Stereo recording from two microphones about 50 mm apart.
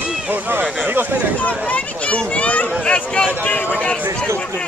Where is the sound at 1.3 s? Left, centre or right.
Left.